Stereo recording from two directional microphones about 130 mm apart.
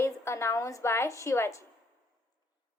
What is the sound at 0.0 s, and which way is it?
A woman's voice, 20° left (ahead or behind).